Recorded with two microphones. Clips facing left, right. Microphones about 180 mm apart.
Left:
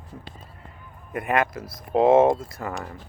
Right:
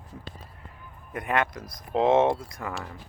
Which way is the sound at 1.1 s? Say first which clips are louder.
Left 3 dB; 5° left (ahead or behind).